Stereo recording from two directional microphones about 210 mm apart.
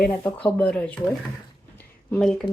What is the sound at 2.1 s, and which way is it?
Speech, 5° left (ahead or behind).